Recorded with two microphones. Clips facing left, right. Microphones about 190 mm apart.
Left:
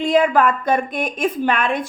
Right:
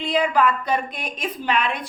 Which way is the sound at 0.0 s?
50° left (ahead or behind).